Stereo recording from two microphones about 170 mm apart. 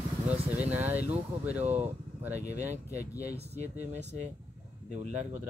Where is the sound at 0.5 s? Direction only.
10° right (ahead or behind).